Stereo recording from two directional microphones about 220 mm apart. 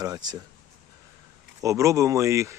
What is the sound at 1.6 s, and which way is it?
Speech, 15° right (ahead or behind).